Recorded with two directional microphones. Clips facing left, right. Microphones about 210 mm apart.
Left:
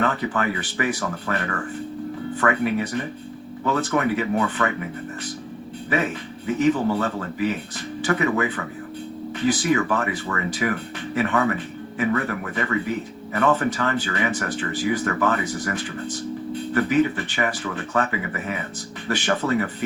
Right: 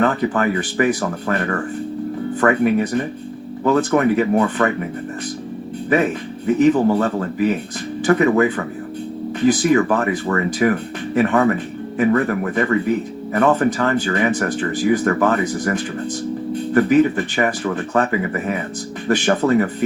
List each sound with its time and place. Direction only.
0.0 s speech: 45° right (ahead or behind)
5.9 s speech: 45° right (ahead or behind)